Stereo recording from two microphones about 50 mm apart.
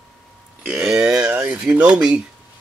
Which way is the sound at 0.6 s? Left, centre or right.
Centre.